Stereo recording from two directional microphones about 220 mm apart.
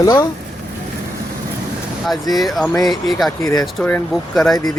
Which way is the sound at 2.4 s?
Centre (ahead or behind).